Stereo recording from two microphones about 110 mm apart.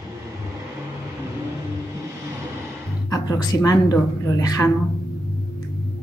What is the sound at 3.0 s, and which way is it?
Speech, 35° left (ahead or behind).